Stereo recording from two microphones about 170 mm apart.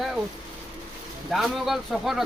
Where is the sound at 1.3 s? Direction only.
Centre (ahead or behind).